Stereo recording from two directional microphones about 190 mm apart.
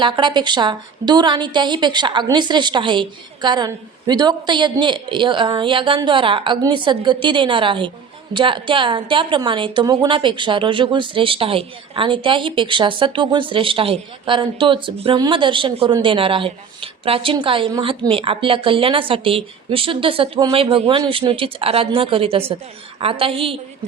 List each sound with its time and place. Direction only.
0.0 s a woman's voice: 25° right (ahead or behind)